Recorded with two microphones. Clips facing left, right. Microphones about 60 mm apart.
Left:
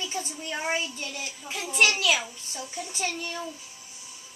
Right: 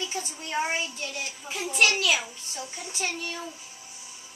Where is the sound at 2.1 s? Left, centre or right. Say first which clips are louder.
Left 1 dB; centre.